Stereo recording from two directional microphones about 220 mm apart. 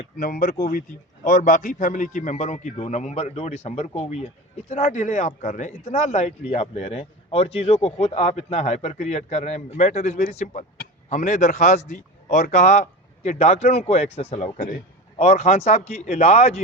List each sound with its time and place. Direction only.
0.2 s a man's voice: 40° left (ahead or behind)